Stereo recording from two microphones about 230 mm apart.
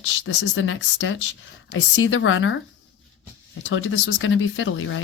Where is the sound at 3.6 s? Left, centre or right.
Left.